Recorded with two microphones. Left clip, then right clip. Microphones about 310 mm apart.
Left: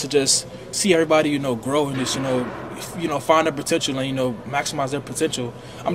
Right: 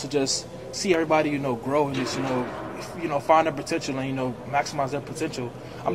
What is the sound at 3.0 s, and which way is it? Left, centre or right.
A man's voice, left.